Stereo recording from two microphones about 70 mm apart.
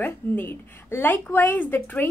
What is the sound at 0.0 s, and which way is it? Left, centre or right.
A woman's voice, left.